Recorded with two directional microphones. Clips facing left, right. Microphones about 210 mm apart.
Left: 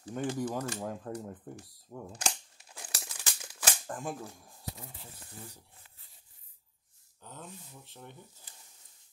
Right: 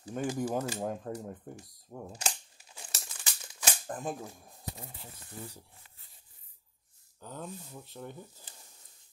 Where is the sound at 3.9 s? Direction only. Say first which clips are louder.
Right 1 dB; 20° right (ahead or behind).